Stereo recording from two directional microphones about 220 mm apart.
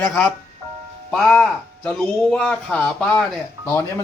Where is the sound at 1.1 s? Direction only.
5° left (ahead or behind).